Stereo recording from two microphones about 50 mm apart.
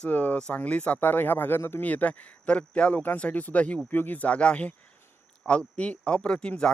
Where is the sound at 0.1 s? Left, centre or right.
Left.